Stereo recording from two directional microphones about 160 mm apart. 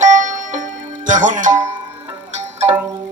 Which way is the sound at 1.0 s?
50° right (ahead or behind).